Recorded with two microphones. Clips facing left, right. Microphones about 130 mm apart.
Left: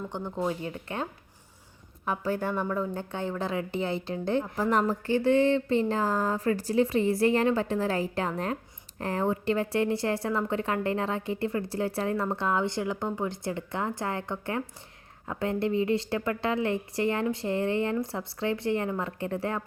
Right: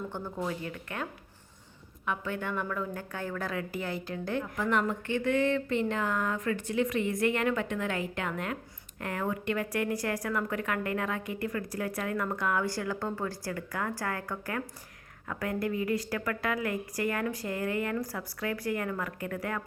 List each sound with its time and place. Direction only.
0.3 s a woman's voice: 25° left (ahead or behind)
2.0 s a woman's voice: 35° left (ahead or behind)